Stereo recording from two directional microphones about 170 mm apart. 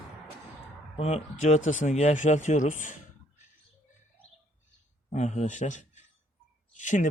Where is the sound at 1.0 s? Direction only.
40° left (ahead or behind).